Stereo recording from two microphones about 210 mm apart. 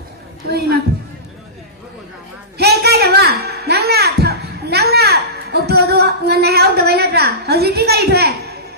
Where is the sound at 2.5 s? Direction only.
50° right (ahead or behind).